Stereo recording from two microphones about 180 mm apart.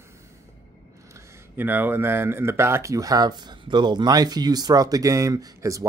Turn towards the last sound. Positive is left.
turn(degrees=-15)  # may be behind; listen again after turning